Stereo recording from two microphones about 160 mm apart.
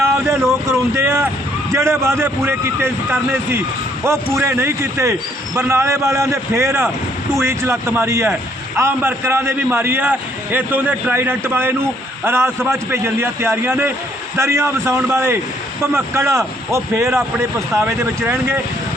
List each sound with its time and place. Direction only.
0.7 s a man's voice: 15° right (ahead or behind)